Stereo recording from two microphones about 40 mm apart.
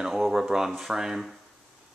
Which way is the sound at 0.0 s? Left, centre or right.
Centre.